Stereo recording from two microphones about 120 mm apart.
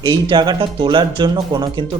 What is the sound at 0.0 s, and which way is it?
Speech, 40° right (ahead or behind).